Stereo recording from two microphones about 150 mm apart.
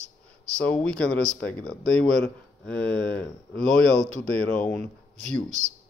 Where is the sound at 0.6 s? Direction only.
5° left (ahead or behind).